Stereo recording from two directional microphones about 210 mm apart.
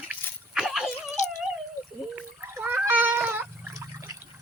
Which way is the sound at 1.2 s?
35° left (ahead or behind).